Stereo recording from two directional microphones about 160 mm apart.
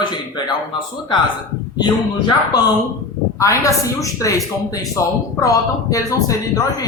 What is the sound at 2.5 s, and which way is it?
Speech, 25° left (ahead or behind).